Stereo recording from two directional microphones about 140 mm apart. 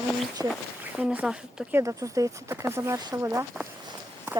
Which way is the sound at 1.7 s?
20° right (ahead or behind).